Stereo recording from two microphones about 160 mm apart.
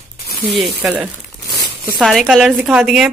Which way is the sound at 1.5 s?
Centre (ahead or behind).